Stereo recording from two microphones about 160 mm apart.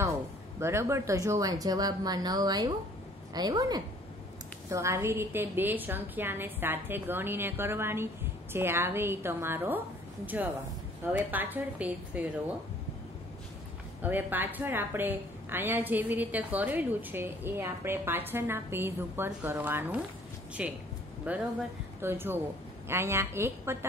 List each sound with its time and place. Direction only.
0.6 s a woman's voice: 15° right (ahead or behind)
14.0 s a woman's voice: 10° right (ahead or behind)